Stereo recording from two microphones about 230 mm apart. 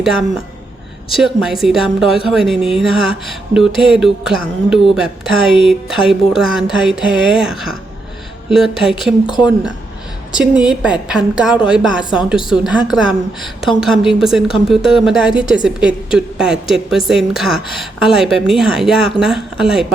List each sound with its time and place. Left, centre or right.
1.1 s a woman's voice: centre
9.3 s a woman's voice: centre
10.3 s a woman's voice: centre